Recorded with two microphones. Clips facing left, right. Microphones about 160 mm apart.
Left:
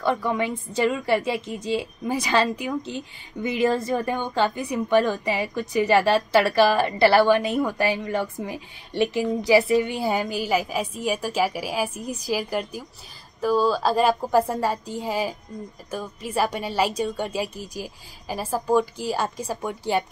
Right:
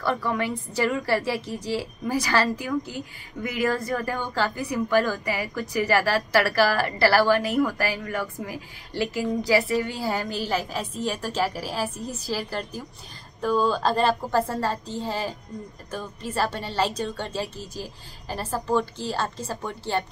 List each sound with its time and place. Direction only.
0.0 s a woman's voice: 20° left (ahead or behind)